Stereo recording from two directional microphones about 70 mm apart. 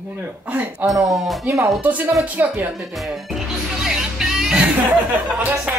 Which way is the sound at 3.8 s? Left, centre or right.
Centre.